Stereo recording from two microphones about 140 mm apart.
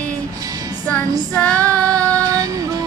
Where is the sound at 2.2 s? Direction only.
25° right (ahead or behind).